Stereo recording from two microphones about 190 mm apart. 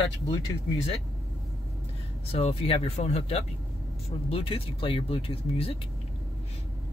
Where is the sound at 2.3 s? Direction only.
30° left (ahead or behind).